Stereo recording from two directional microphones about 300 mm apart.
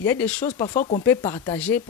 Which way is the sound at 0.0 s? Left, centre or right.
Centre.